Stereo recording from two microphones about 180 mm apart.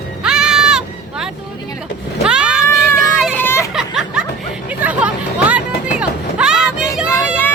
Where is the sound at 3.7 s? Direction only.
5° right (ahead or behind).